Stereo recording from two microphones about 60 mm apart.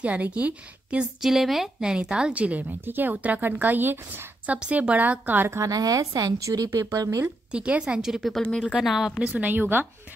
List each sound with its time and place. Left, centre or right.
0.0 s a woman's voice: right
1.2 s a woman's voice: centre; by 4.3 s right
4.5 s a woman's voice: right
5.7 s a woman's voice: right
6.7 s speech: right
7.0 s speech: right
7.5 s a woman's voice: centre
8.3 s speech: centre
8.7 s a woman's voice: centre
9.2 s a woman's voice: right